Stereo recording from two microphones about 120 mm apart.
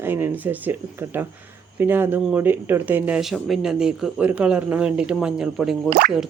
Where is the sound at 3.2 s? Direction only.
Centre (ahead or behind).